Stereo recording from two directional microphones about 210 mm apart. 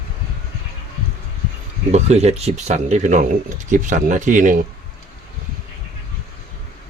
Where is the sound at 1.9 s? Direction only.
30° right (ahead or behind).